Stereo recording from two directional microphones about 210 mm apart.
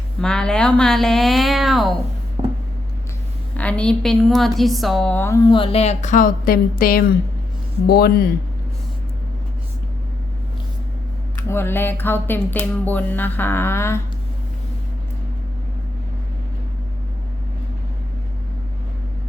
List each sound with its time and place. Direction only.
0.2 s a woman's voice: 5° left (ahead or behind)
3.6 s a woman's voice: 5° left (ahead or behind)
5.5 s a woman's voice: 25° left (ahead or behind); by 8.3 s 45° left (ahead or behind)
11.4 s a sound: 10° left (ahead or behind)